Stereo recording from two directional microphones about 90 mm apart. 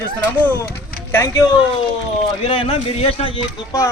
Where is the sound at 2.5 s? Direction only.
90° left.